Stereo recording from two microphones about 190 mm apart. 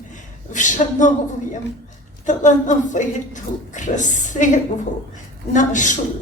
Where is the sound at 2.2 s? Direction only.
40° left (ahead or behind).